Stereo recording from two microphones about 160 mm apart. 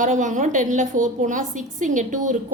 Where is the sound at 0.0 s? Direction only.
50° right (ahead or behind).